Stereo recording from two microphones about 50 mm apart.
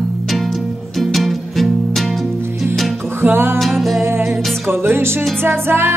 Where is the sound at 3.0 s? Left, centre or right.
Right.